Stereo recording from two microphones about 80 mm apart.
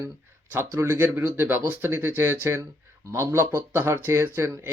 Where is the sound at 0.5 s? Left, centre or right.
Right.